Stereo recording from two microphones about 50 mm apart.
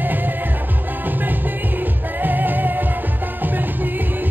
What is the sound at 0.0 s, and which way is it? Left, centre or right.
Music, right.